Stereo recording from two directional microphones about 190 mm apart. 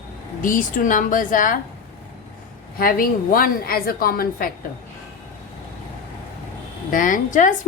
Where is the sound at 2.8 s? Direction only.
50° left (ahead or behind).